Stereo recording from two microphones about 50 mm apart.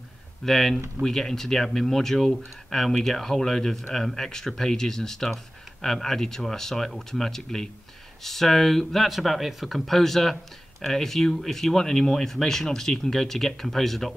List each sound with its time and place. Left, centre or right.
0.5 s speech: centre